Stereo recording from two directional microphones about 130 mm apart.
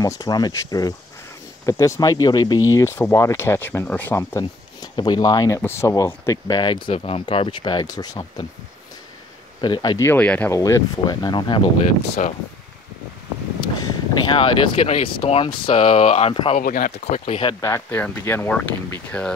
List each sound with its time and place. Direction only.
0.0 s speech: 30° left (ahead or behind); by 4.2 s 15° left (ahead or behind)
4.2 s speech: 25° left (ahead or behind)
5.6 s speech: 20° left (ahead or behind); by 6.8 s 35° left (ahead or behind)
6.9 s speech: 50° left (ahead or behind)
9.6 s speech: 35° left (ahead or behind)
10.0 s speech: 10° left (ahead or behind)
10.5 s speech: 25° left (ahead or behind)
11.8 s speech: 60° left (ahead or behind)
13.6 s speech: 30° left (ahead or behind)
16.5 s speech: 90° left
17.4 s speech: 35° left (ahead or behind)
17.6 s speech: 20° left (ahead or behind)